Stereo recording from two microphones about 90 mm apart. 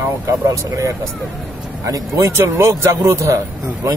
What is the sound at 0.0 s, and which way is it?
A man's voice, 35° right (ahead or behind).